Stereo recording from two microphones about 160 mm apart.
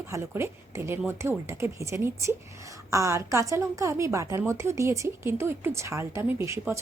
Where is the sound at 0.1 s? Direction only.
15° right (ahead or behind).